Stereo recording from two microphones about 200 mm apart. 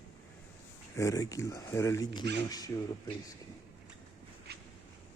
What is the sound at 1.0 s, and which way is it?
Speech, 15° left (ahead or behind).